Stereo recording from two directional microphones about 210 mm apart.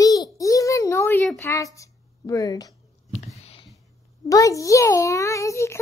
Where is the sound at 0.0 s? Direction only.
15° left (ahead or behind).